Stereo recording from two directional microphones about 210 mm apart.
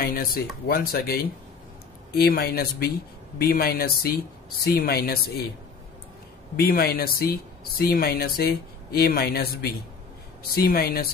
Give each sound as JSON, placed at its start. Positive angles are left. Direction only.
{"t": 0.0, "sound": "speech", "side_deg": 45}
{"t": 6.5, "sound": "speech", "side_deg": 45}